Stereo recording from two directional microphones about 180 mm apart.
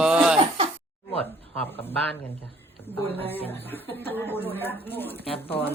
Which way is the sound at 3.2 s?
10° left (ahead or behind).